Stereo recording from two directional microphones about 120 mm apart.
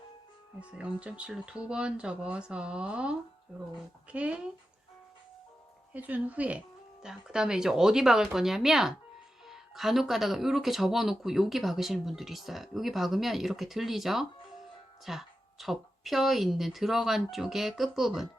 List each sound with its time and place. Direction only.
0.6 s speech: 10° right (ahead or behind)
5.9 s speech: 15° right (ahead or behind)